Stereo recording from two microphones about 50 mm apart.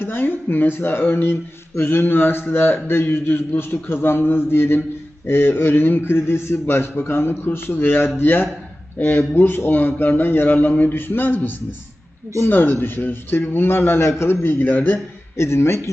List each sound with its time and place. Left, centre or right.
0.0 s speech: left
14.4 s speech: left
15.4 s speech: left